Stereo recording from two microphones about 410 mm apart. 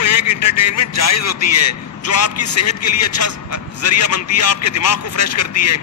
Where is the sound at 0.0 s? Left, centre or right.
Left.